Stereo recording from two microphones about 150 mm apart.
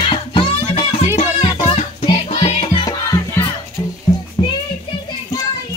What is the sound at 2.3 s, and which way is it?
Music, 40° left (ahead or behind).